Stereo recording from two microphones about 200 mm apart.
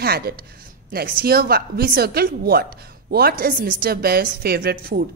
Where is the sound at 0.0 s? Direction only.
50° right (ahead or behind).